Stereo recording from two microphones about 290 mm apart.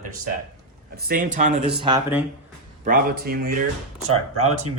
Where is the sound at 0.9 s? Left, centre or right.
Right.